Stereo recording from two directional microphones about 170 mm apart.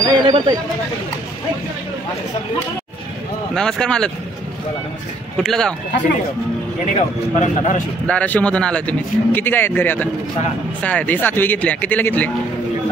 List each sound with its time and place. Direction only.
0.0 s speech: 25° right (ahead or behind)
3.5 s speech: 5° left (ahead or behind)
5.4 s speech: 5° left (ahead or behind)
6.9 s speech: 45° left (ahead or behind)
8.1 s speech: 10° left (ahead or behind)